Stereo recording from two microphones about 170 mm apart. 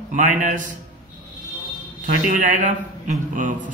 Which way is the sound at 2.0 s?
50° right (ahead or behind).